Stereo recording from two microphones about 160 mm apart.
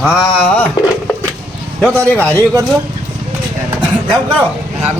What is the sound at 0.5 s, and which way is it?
A man's voice, 10° left (ahead or behind).